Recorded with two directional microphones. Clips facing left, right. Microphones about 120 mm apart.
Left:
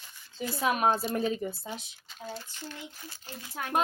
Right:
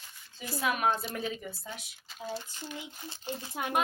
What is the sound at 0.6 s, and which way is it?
Speech, 30° left (ahead or behind).